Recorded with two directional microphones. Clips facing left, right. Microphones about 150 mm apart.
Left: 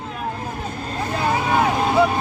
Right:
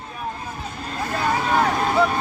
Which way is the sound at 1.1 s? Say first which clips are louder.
Left 1 dB; 15° left (ahead or behind).